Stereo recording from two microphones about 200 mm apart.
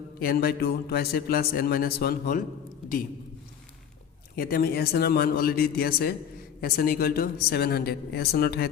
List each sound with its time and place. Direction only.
0.2 s a man's voice: 50° left (ahead or behind)
4.4 s a man's voice: 50° left (ahead or behind)